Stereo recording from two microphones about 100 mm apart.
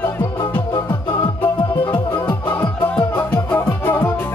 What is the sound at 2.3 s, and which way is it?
Music, 20° left (ahead or behind).